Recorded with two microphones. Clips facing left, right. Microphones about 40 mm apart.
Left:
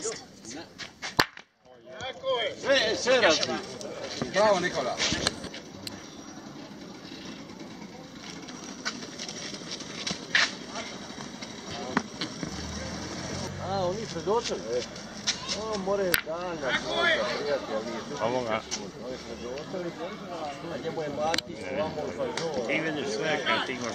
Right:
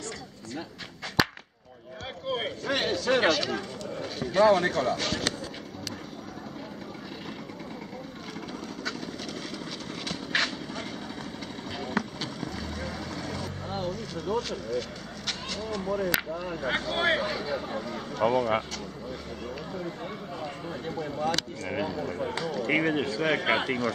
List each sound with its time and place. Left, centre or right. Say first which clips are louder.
1.2 s whip: even; centre
2.2 s speech: left 3 dB; centre
2.6 s speech: left 4 dB; centre
4.9 s speech: even; centre
10.0 s a sound: left 2 dB; centre
12.7 s vehicle: right 1 dB; centre
16.1 s speech: left 1 dB; centre
16.3 s speech: even; centre
19.8 s speech: left 1 dB; centre